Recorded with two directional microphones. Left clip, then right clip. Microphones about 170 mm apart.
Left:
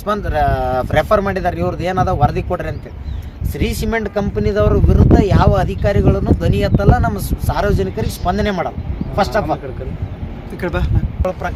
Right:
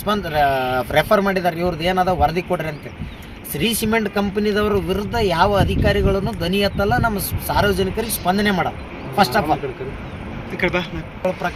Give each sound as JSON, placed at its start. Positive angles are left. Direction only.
{"t": 0.0, "sound": "speech", "side_deg": -5}
{"t": 3.8, "sound": "speech", "side_deg": -10}
{"t": 10.6, "sound": "speech", "side_deg": 90}